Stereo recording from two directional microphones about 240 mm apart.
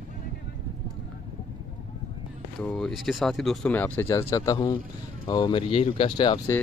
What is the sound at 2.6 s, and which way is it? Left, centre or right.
A man's voice, centre.